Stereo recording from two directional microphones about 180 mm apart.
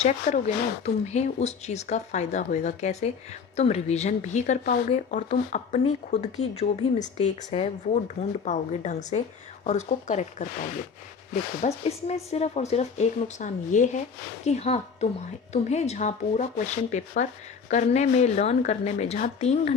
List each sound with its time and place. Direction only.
0.0 s speech: 40° left (ahead or behind)
11.6 s speech: 35° left (ahead or behind)